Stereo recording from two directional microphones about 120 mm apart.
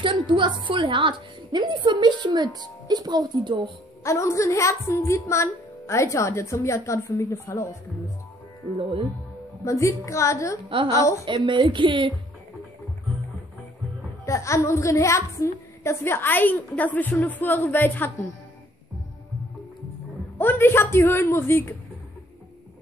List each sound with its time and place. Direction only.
0.0 s a woman's voice: 40° right (ahead or behind)
4.0 s a woman's voice: 25° left (ahead or behind)
9.7 s a woman's voice: 25° left (ahead or behind)
11.2 s speech: 45° right (ahead or behind)
14.2 s a woman's voice: 25° left (ahead or behind)
20.3 s a woman's voice: 20° left (ahead or behind)